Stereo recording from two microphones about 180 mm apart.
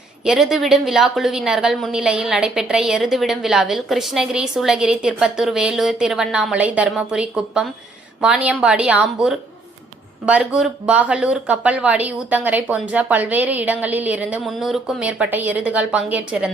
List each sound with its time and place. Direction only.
0.3 s a woman's voice: 5° right (ahead or behind)